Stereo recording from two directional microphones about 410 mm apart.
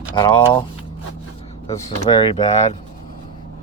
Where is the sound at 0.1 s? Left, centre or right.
Centre.